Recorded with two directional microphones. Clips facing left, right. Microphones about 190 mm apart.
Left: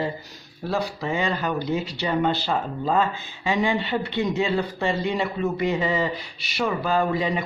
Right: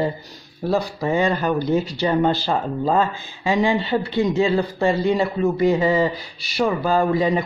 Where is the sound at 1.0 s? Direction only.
45° right (ahead or behind).